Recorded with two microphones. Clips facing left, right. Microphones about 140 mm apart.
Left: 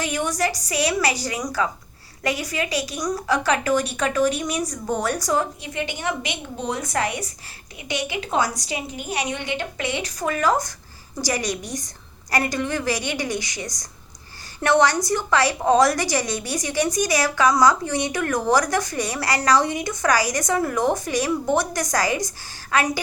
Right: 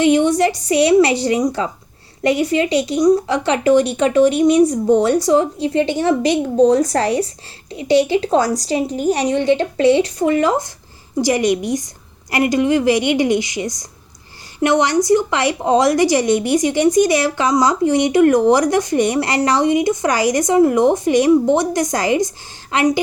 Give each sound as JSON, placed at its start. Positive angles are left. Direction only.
{"t": 0.0, "sound": "a woman's voice", "side_deg": -25}